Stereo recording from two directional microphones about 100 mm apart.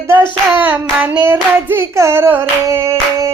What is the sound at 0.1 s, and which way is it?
Hands, 20° right (ahead or behind).